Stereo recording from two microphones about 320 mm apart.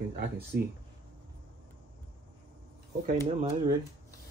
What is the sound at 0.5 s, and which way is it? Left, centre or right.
Speech, right.